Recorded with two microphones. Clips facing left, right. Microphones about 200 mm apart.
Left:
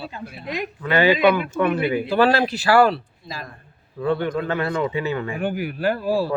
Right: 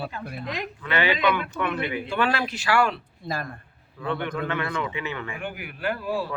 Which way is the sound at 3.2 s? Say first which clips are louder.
Right 5 dB; 60° right (ahead or behind).